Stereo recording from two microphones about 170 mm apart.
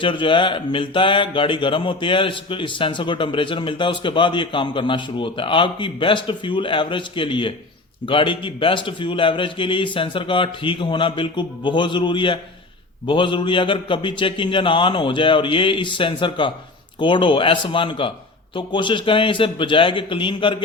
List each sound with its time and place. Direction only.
0.0 s speech: 30° left (ahead or behind)